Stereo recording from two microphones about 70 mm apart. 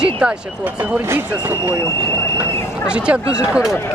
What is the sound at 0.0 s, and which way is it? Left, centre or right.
Speech, centre.